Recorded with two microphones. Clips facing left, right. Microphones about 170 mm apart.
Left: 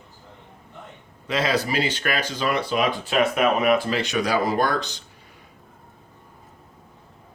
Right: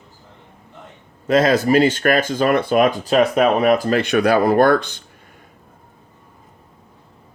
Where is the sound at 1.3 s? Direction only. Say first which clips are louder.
Right 9 dB; 45° right (ahead or behind).